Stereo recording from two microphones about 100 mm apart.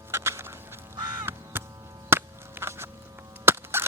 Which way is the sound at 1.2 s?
20° right (ahead or behind).